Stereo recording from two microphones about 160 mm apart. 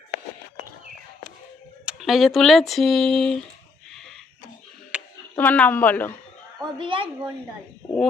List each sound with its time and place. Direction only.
1.8 s speech: 5° right (ahead or behind)
4.9 s a sound: 5° right (ahead or behind)
5.3 s speech: 10° left (ahead or behind)
6.7 s speech: 30° right (ahead or behind)